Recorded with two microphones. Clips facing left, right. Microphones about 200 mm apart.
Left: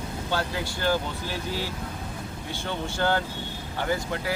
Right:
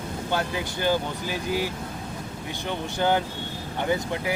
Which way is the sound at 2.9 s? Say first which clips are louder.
Right 3 dB; 15° right (ahead or behind).